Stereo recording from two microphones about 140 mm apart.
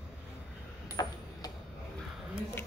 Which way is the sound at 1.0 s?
30° left (ahead or behind).